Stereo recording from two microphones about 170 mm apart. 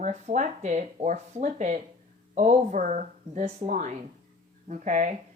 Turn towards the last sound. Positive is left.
turn(degrees=-45)  # may be behind; listen again after turning